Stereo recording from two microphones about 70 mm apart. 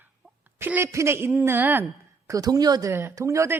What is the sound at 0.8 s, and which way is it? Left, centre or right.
Speech, right.